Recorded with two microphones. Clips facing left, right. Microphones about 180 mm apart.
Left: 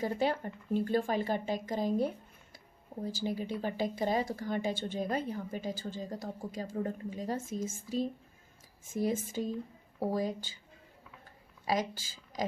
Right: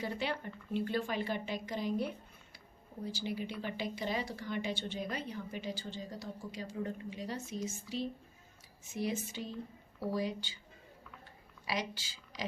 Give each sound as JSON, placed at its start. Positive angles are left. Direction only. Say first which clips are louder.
{"t": 0.0, "sound": "speech", "louder": "left 6 dB", "side_deg": 45}
{"t": 11.6, "sound": "speech", "louder": "left 6 dB", "side_deg": 45}